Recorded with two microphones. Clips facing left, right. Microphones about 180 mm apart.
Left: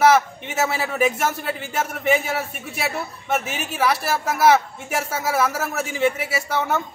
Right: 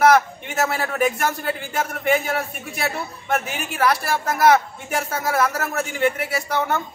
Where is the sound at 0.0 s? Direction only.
5° left (ahead or behind).